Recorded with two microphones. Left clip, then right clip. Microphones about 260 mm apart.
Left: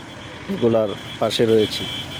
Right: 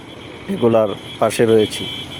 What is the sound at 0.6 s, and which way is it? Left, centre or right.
Speech, centre.